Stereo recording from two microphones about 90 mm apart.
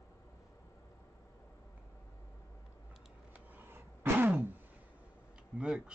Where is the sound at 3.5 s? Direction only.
20° right (ahead or behind).